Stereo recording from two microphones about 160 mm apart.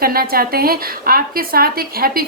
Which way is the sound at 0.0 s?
70° right (ahead or behind).